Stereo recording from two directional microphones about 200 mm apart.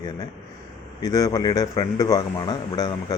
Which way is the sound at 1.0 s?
20° left (ahead or behind).